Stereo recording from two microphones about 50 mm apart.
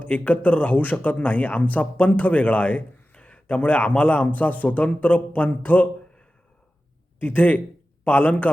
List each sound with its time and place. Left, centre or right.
0.0 s speech: left
7.2 s a man's voice: left